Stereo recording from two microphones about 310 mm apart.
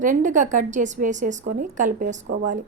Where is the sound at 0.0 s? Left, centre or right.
Right.